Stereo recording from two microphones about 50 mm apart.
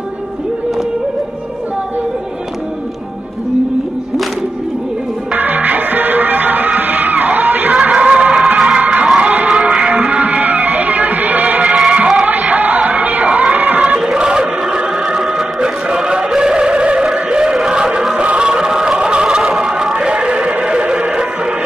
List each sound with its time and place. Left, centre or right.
5.3 s music: right
7.8 s music: right
9.5 s music: centre
10.4 s music: right
13.9 s music: centre
18.2 s music: right
18.5 s music: centre